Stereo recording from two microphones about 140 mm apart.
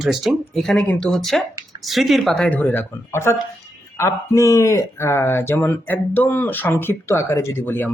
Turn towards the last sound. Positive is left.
turn(degrees=15)  # may be behind; listen again after turning